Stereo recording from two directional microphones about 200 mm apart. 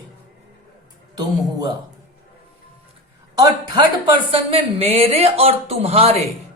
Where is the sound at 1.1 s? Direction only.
20° right (ahead or behind).